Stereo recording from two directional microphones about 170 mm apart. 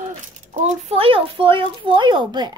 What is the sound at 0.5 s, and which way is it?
Speech, 40° right (ahead or behind).